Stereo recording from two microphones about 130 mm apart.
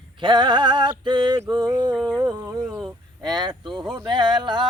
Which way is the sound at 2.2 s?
25° right (ahead or behind).